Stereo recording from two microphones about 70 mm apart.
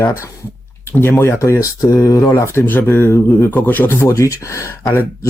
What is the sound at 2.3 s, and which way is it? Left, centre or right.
Speech, left.